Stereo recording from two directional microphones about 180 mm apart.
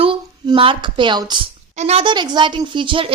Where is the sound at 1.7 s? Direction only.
35° right (ahead or behind).